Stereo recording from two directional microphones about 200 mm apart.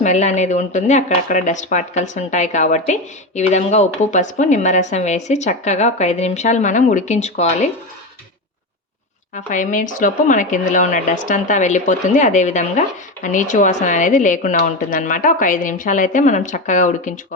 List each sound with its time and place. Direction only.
0.0 s speech: 35° left (ahead or behind)
9.3 s speech: 40° left (ahead or behind)